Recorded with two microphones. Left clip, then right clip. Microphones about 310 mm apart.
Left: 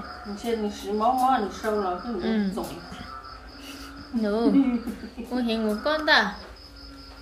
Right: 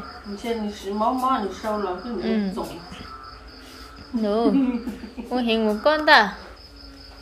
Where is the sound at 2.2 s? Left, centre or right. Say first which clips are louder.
Right 3 dB; centre.